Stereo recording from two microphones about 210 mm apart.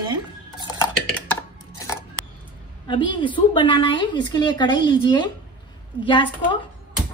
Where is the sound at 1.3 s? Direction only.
10° left (ahead or behind).